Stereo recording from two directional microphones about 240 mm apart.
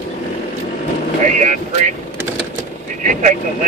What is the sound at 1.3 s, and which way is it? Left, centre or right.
Speech, right.